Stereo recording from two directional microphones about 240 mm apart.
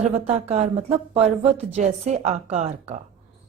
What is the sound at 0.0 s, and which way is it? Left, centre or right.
A woman's voice, right.